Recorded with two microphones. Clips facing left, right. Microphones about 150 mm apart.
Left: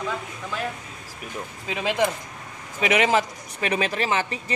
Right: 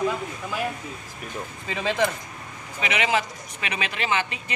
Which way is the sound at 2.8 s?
45° left (ahead or behind).